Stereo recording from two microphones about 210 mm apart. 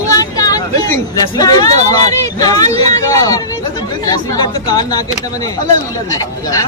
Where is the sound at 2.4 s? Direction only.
15° left (ahead or behind).